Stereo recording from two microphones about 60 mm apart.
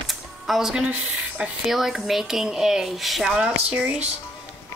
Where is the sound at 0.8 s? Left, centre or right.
Right.